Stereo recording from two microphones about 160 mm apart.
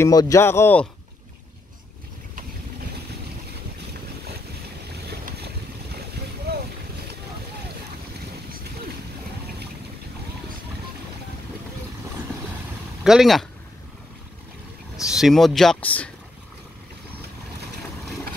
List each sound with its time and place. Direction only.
0.0 s speech: 20° left (ahead or behind)
5.1 s boat: 80° right
13.0 s speech: 5° right (ahead or behind)
15.1 s speech: centre (ahead or behind)